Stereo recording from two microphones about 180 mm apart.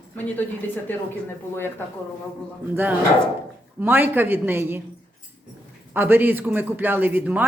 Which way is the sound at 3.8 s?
10° right (ahead or behind).